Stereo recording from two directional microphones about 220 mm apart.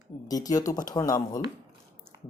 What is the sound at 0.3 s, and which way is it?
Speech, 15° left (ahead or behind).